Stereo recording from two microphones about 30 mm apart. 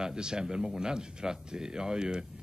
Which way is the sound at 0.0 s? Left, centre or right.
Right.